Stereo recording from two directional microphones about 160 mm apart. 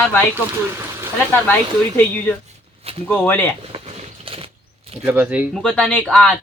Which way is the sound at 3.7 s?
40° right (ahead or behind).